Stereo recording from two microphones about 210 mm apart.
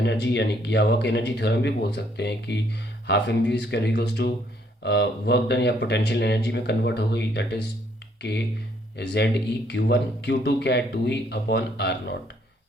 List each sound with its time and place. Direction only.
0.0 s speech: 55° left (ahead or behind)